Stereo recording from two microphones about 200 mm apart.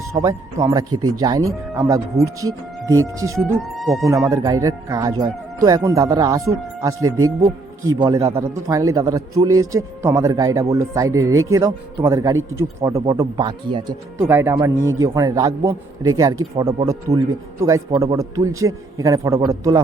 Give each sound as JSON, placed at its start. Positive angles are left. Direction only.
{"t": 0.1, "sound": "speech", "side_deg": -15}
{"t": 0.9, "sound": "speech", "side_deg": -90}
{"t": 1.2, "sound": "speech", "side_deg": -15}
{"t": 14.3, "sound": "speech", "side_deg": -10}